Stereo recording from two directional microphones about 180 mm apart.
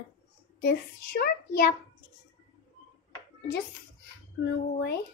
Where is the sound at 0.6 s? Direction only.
55° left (ahead or behind).